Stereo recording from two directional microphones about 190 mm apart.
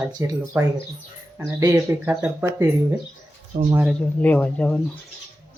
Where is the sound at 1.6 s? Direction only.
15° right (ahead or behind).